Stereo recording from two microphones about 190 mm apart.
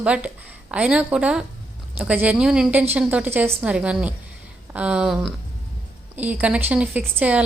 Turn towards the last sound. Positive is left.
turn(degrees=-5)  # may be behind; listen again after turning